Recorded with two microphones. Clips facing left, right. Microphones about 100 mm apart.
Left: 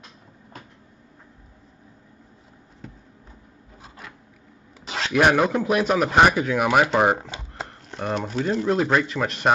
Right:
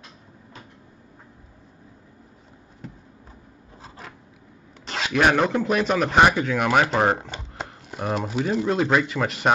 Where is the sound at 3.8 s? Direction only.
35° right (ahead or behind).